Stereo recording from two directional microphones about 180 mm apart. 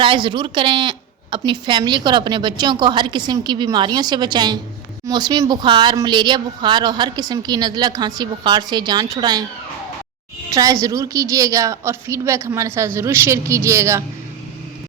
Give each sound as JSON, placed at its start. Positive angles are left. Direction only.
{"t": 0.0, "sound": "a woman's voice", "side_deg": -30}
{"t": 10.5, "sound": "a woman's voice", "side_deg": -20}